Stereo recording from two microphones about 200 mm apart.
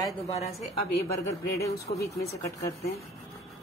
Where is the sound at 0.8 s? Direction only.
50° left (ahead or behind).